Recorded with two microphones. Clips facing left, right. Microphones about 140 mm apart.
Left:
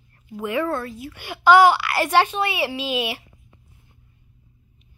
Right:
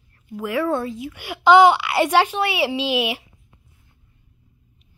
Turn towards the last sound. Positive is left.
turn(degrees=-10)  # may be behind; listen again after turning